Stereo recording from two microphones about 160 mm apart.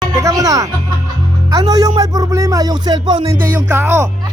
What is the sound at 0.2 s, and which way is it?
Music, 20° right (ahead or behind).